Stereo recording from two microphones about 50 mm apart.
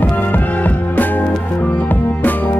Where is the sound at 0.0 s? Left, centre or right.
Left.